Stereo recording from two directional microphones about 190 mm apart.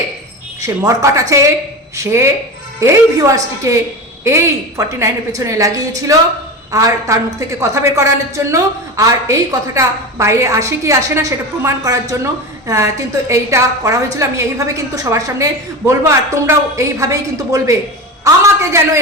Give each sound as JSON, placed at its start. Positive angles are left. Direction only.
{"t": 0.6, "sound": "a woman's voice", "side_deg": -15}